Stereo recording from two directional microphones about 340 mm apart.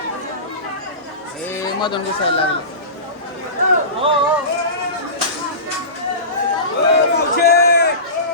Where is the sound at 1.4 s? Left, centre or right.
Centre.